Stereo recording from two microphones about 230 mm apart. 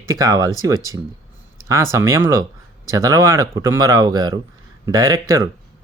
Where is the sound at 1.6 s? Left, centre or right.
Centre.